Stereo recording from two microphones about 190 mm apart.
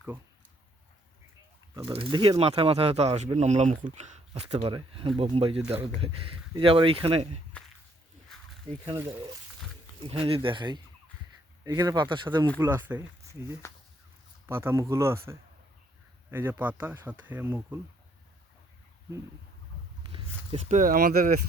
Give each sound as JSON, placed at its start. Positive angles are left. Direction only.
{"t": 1.9, "sound": "speech", "side_deg": -25}
{"t": 8.8, "sound": "speech", "side_deg": -15}
{"t": 10.0, "sound": "speech", "side_deg": -30}
{"t": 12.5, "sound": "speech", "side_deg": -15}
{"t": 13.6, "sound": "speech", "side_deg": 15}
{"t": 14.4, "sound": "speech", "side_deg": -10}
{"t": 16.3, "sound": "speech", "side_deg": -10}
{"t": 20.0, "sound": "a sound", "side_deg": -25}
{"t": 20.7, "sound": "speech", "side_deg": -45}